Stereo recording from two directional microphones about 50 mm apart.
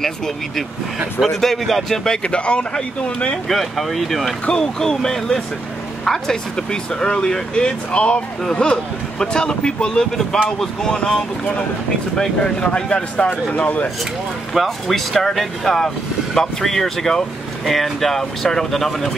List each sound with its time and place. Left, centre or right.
1.2 s speech: centre
2.0 s speech: left
3.4 s speech: centre
4.5 s speech: centre
14.5 s speech: centre